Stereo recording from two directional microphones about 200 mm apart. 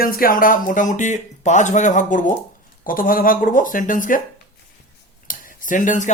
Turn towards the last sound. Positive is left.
turn(degrees=40)  # may be behind; listen again after turning